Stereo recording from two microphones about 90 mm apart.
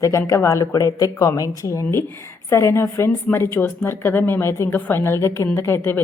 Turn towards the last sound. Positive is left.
turn(degrees=30)  # may be behind; listen again after turning